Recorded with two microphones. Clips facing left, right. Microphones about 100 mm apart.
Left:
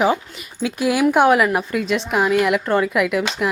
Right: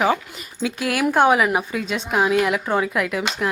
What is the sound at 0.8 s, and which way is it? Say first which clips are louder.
Speech: left 6 dB; 15° left (ahead or behind).